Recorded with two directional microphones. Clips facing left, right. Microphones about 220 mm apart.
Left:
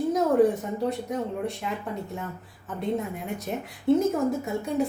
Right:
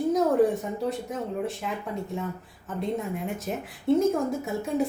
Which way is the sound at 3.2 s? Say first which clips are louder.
Even; centre (ahead or behind).